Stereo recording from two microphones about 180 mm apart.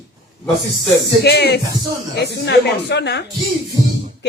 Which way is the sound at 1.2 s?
65° left (ahead or behind).